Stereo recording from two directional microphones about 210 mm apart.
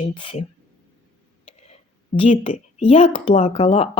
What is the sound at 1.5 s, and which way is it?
Speech, 30° left (ahead or behind).